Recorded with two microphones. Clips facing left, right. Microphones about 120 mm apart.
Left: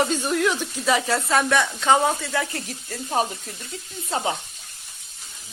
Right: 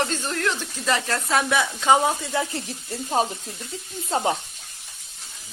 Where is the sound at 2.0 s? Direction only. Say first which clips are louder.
Even; 20° right (ahead or behind).